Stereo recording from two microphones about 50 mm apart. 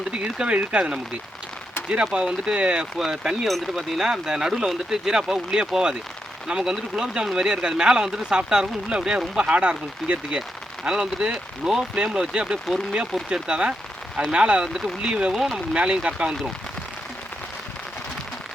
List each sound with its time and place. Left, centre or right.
0.1 s speech: right
2.1 s speech: centre
3.4 s speech: centre; by 14.7 s right
14.7 s speech: centre
15.0 s speech: centre